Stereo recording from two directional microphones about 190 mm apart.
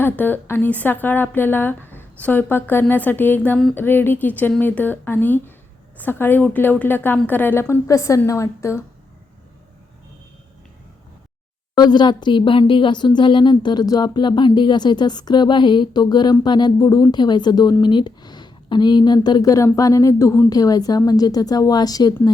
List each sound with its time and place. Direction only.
0.0 s a woman's voice: 10° left (ahead or behind)
11.7 s speech: 20° left (ahead or behind)